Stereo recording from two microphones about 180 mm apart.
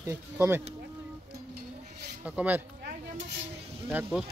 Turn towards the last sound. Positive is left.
turn(degrees=-5)  # may be behind; listen again after turning